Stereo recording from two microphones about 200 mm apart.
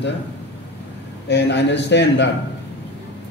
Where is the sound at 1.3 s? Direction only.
60° left (ahead or behind).